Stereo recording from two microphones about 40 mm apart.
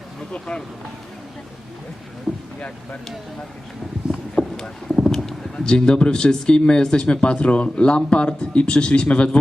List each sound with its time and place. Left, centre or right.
0.3 s speech: left
2.6 s speech: left
4.1 s a sound: left
4.9 s speech: centre; by 9.4 s left